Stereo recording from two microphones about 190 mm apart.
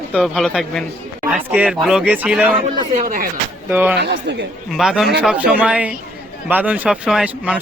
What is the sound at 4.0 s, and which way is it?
Speech, 65° right (ahead or behind).